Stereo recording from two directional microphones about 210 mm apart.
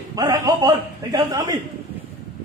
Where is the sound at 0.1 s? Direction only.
15° right (ahead or behind).